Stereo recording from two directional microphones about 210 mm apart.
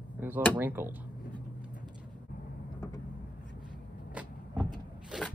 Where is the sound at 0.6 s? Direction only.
10° right (ahead or behind).